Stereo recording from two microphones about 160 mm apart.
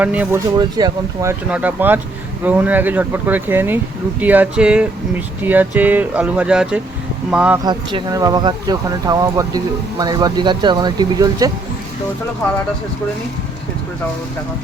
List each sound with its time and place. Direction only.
0.0 s speech: 10° right (ahead or behind)
0.3 s speech: 25° right (ahead or behind)
1.5 s speech: 10° right (ahead or behind)
7.6 s speech: 30° right (ahead or behind)